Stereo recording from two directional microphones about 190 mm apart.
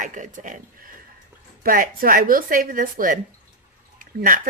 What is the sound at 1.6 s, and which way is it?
A woman's voice, 50° right (ahead or behind).